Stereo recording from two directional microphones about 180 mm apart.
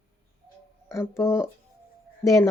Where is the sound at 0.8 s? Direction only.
15° left (ahead or behind).